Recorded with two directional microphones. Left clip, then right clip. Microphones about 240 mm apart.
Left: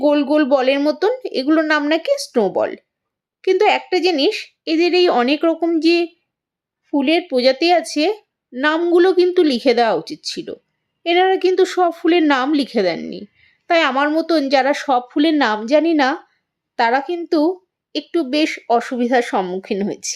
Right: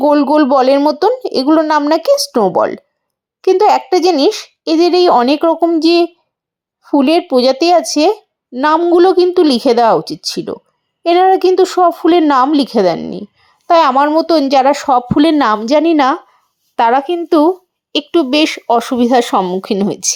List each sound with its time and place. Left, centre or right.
0.0 s a child's voice: centre
3.7 s a child's voice: centre
4.8 s speech: centre